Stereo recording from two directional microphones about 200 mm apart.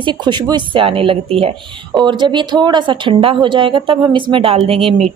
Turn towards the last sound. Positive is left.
turn(degrees=-30)  # may be behind; listen again after turning